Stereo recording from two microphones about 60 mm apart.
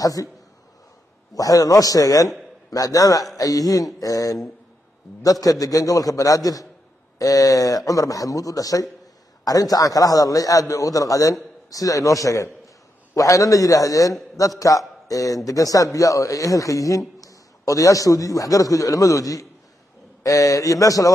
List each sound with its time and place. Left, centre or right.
0.0 s a man's voice: left
1.3 s a man's voice: left
2.7 s a man's voice: left
9.4 s a man's voice: left